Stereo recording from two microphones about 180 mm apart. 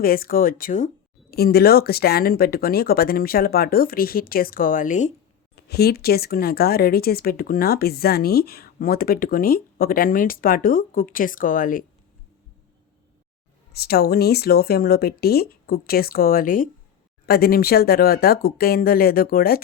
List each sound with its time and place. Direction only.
0.0 s speech: 55° left (ahead or behind)
1.3 s speech: 60° left (ahead or behind); by 5.1 s 45° left (ahead or behind)
5.5 s speech: 60° left (ahead or behind)
13.7 s speech: 60° left (ahead or behind)